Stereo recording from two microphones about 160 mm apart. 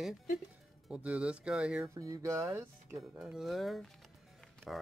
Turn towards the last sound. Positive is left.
turn(degrees=0)  # may be behind; listen again after turning